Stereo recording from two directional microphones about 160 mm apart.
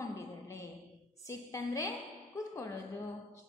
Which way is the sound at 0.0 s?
20° left (ahead or behind).